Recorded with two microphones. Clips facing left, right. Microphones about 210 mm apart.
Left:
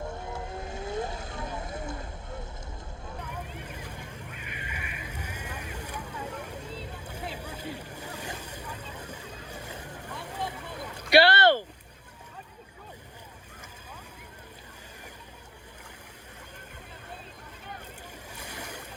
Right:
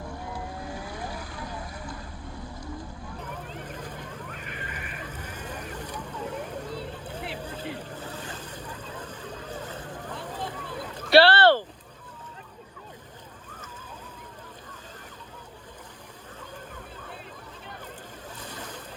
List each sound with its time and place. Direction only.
0.1 s vehicle: 25° left (ahead or behind)
3.5 s a sound: 10° left (ahead or behind)
6.5 s vehicle: 10° left (ahead or behind)
7.0 s boat: 10° left (ahead or behind)
18.3 s vehicle: 10° left (ahead or behind)